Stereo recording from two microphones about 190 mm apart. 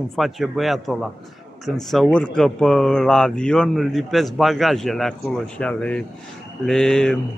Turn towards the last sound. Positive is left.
turn(degrees=5)  # may be behind; listen again after turning